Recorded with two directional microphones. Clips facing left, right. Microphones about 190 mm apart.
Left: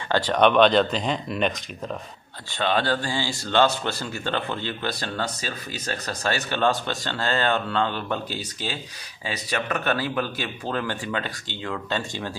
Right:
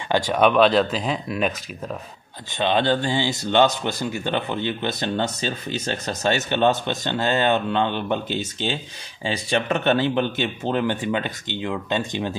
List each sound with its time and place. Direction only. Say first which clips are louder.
0.1 s speech: right 1 dB; 10° right (ahead or behind)
2.5 s speech: right 3 dB; 20° right (ahead or behind)